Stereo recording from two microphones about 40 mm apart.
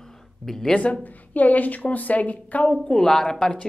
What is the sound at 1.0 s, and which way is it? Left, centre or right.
Speech, left.